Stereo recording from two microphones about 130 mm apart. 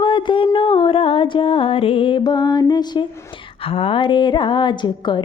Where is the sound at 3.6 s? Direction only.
45° left (ahead or behind).